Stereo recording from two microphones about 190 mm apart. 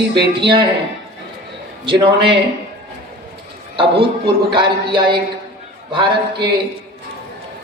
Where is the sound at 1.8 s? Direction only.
25° right (ahead or behind).